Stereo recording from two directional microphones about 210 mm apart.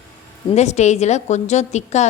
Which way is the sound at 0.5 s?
35° left (ahead or behind).